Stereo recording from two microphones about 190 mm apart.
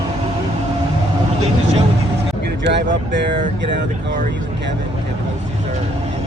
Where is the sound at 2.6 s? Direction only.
65° right (ahead or behind).